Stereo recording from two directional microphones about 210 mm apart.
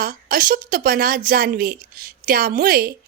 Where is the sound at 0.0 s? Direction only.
45° right (ahead or behind).